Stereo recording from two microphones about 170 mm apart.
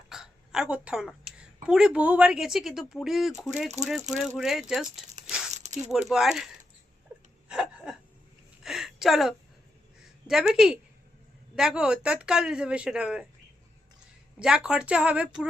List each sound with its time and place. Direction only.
0.1 s hiccup: 5° right (ahead or behind)
1.6 s speech: 5° right (ahead or behind)
7.4 s a sound: 5° right (ahead or behind)
10.2 s speech: centre (ahead or behind)
14.3 s a woman's voice: 5° right (ahead or behind)